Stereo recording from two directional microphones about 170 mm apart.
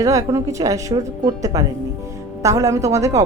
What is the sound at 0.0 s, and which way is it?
A woman's voice, 20° right (ahead or behind).